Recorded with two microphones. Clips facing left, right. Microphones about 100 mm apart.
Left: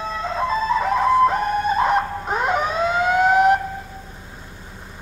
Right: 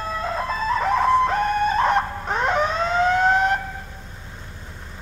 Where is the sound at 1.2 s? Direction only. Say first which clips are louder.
Left 1 dB; 5° left (ahead or behind).